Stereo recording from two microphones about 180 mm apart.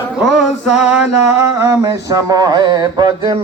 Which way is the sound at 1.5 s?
20° right (ahead or behind).